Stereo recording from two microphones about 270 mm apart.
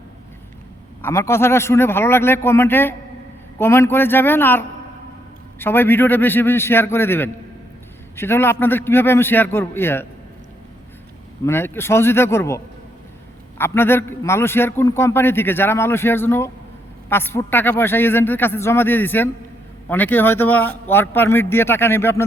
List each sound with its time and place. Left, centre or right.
1.0 s a man's voice: centre
11.4 s a man's voice: centre